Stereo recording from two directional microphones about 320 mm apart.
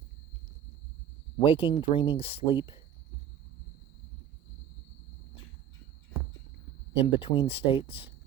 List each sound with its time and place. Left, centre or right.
1.4 s speech: centre
6.9 s speech: centre